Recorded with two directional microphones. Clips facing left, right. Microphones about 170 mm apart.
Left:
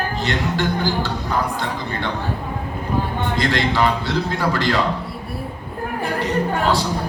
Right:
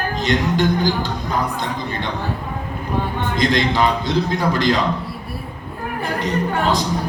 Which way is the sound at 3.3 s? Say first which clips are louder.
Right 2 dB; 15° right (ahead or behind).